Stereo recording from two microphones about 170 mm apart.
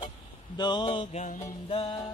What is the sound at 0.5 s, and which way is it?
Mantra, 25° left (ahead or behind).